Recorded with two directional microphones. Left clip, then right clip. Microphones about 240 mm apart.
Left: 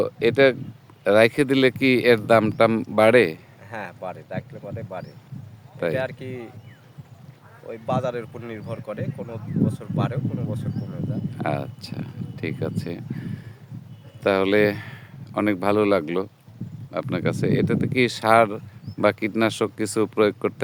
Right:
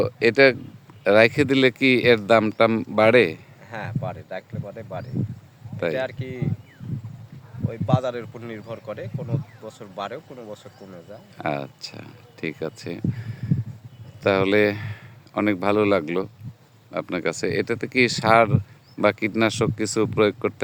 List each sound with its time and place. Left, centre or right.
0.0 s speech: centre
7.7 s speech: centre
11.3 s speech: centre